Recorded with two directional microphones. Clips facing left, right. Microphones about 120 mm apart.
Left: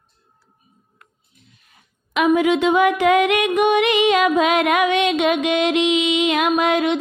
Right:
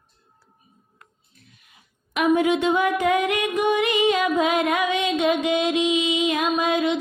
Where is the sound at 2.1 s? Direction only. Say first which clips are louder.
Left 3 dB; 90° left.